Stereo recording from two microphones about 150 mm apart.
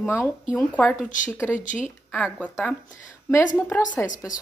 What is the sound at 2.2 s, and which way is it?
Speech, 5° left (ahead or behind).